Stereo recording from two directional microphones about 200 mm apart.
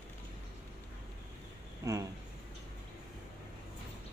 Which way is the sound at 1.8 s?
15° right (ahead or behind).